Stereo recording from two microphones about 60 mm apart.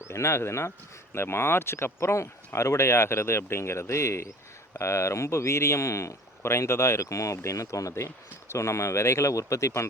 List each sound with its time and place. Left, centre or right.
0.0 s a man's voice: left